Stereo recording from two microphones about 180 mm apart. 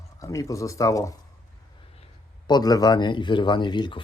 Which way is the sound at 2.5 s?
20° left (ahead or behind).